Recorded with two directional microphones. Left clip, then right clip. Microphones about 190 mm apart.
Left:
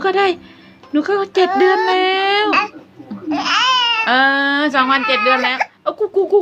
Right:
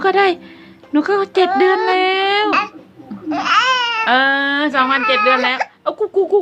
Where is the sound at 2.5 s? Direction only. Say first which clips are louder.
Left 1 dB; 10° right (ahead or behind).